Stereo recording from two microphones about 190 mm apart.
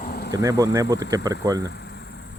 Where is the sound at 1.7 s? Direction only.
65° left (ahead or behind).